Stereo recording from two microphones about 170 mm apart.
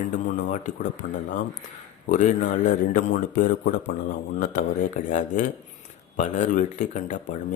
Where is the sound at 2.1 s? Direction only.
50° left (ahead or behind).